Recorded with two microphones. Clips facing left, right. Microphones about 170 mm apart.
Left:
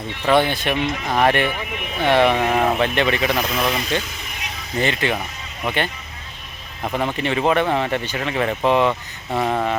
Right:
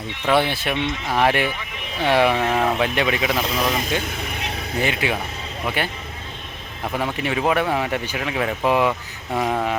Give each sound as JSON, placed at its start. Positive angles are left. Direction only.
{"t": 0.3, "sound": "speech", "side_deg": -5}
{"t": 2.3, "sound": "speech", "side_deg": 10}
{"t": 2.8, "sound": "speech", "side_deg": -5}
{"t": 3.7, "sound": "speech", "side_deg": -45}
{"t": 4.0, "sound": "speech", "side_deg": -60}
{"t": 4.8, "sound": "speech", "side_deg": -10}